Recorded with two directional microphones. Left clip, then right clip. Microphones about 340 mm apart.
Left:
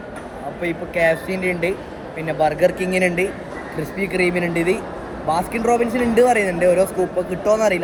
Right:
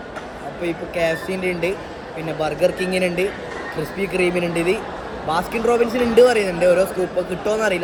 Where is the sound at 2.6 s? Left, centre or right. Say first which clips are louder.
Left 1 dB; centre.